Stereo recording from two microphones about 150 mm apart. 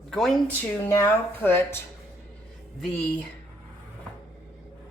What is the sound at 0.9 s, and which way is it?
Speech, 20° left (ahead or behind).